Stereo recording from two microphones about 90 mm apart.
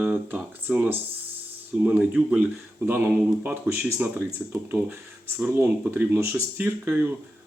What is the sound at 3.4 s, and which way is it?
Speech, 25° right (ahead or behind).